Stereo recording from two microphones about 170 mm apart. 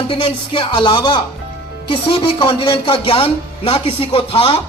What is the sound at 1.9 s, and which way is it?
Speech, 30° left (ahead or behind).